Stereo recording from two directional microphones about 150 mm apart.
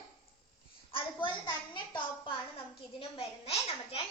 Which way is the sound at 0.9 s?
30° left (ahead or behind).